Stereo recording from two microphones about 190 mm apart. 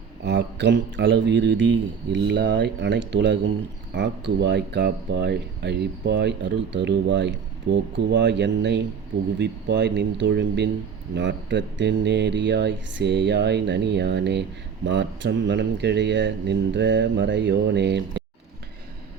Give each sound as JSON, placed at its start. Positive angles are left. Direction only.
{"t": 0.3, "sound": "speech", "side_deg": -65}